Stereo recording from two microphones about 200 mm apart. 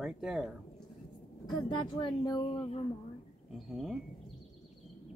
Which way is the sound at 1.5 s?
20° left (ahead or behind).